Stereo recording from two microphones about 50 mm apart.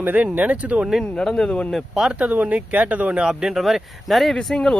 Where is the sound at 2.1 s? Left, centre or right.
Right.